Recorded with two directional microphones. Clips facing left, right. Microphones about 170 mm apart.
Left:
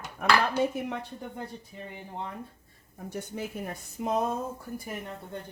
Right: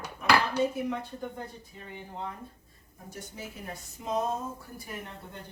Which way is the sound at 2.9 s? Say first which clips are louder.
Left 7 dB; 60° left (ahead or behind).